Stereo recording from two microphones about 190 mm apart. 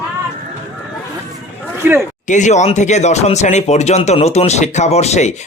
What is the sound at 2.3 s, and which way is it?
Speech, 40° left (ahead or behind).